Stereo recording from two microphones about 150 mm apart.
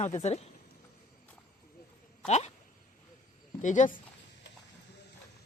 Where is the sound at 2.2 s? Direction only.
50° left (ahead or behind).